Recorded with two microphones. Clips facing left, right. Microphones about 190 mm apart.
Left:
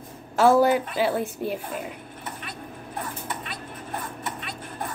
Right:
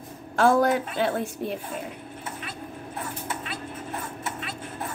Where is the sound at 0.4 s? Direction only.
5° left (ahead or behind).